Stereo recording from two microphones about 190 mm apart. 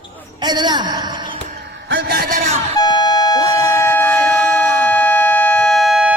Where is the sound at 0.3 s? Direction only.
25° right (ahead or behind).